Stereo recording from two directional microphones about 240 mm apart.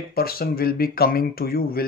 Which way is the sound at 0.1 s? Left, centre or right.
Left.